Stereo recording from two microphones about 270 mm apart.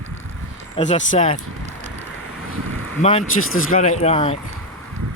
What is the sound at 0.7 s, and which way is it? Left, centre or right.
Speech, left.